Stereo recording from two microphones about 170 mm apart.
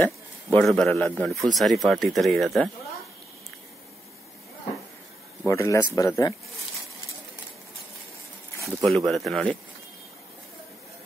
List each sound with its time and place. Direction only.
0.6 s a man's voice: 5° left (ahead or behind)
5.5 s speech: 15° left (ahead or behind)
8.6 s a man's voice: centre (ahead or behind)